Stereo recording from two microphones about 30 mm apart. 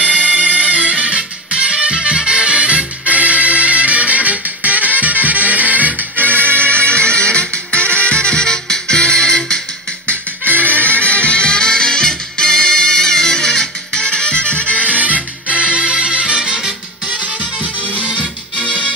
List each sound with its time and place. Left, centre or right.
0.7 s music: right
0.9 s music: right
6.5 s music: left
10.4 s music: right
10.9 s music: left; by 14.0 s centre
14.0 s music: left
14.9 s music: right
15.4 s music: right